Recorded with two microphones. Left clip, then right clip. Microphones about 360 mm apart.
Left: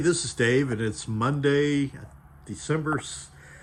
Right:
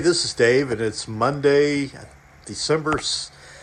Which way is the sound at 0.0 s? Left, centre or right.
Centre.